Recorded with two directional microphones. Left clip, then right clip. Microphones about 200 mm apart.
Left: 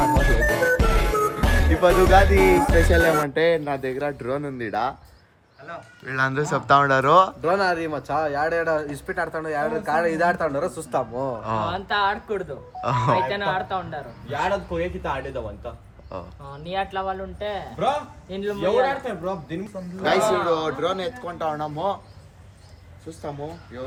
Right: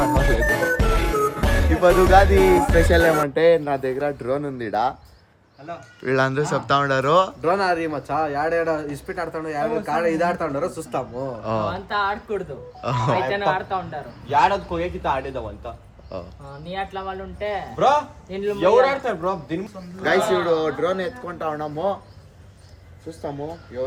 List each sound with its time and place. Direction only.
0.0 s speech: centre (ahead or behind)
5.6 s speech: 20° right (ahead or behind)
6.2 s speech: 5° right (ahead or behind)
11.7 s speech: 25° left (ahead or behind)
12.8 s speech: centre (ahead or behind)
14.3 s speech: 25° right (ahead or behind)
14.5 s speech: 5° right (ahead or behind)
16.5 s speech: 25° left (ahead or behind)
17.4 s speech: centre (ahead or behind)